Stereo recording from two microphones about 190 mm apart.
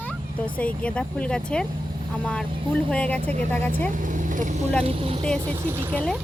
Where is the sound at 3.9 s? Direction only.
45° right (ahead or behind).